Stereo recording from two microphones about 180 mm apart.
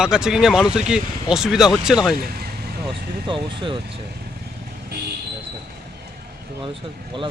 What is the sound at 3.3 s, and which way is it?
Speech, 30° right (ahead or behind).